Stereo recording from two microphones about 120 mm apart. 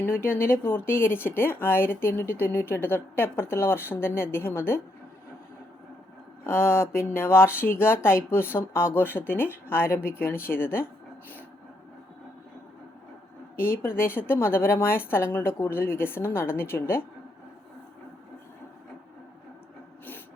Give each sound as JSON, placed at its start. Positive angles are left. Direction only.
{"t": 0.0, "sound": "speech", "side_deg": 20}
{"t": 6.4, "sound": "speech", "side_deg": 20}
{"t": 13.6, "sound": "speech", "side_deg": 20}